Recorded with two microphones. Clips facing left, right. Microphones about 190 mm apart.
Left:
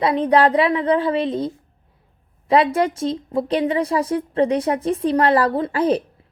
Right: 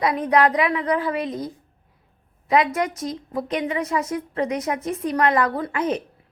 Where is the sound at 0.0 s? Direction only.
30° left (ahead or behind).